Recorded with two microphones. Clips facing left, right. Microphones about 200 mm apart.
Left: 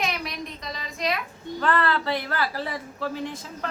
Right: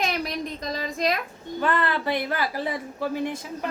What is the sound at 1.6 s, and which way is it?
Speech, 15° right (ahead or behind).